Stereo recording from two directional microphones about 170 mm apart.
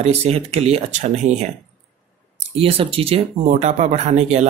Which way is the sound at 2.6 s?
35° right (ahead or behind).